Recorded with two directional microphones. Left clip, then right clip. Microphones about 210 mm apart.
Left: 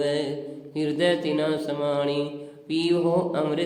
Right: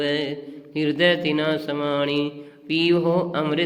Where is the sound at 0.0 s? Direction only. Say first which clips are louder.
Right 1 dB; 20° right (ahead or behind).